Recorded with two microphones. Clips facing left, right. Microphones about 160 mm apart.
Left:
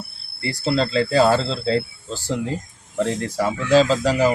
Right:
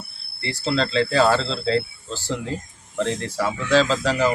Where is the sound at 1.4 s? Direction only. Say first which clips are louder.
Left 1 dB; 40° left (ahead or behind).